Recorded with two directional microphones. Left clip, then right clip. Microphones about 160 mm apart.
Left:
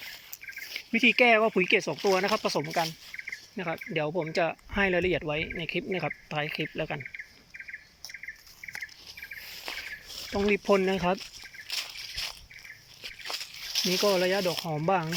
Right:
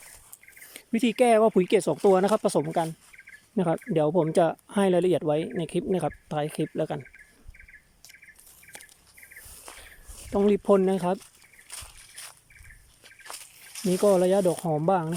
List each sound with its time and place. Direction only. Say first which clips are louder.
0.7 s speech: left 4 dB; 30° right (ahead or behind)
3.5 s insect: right 8 dB; 40° right (ahead or behind)
3.9 s speech: right 6 dB; 40° right (ahead or behind)
10.5 s speech: right 1 dB; 30° right (ahead or behind)
11.7 s a sound: left 11 dB; 5° left (ahead or behind)
13.7 s snake: left 1 dB; 25° left (ahead or behind)
14.0 s speech: right 6 dB; 25° right (ahead or behind)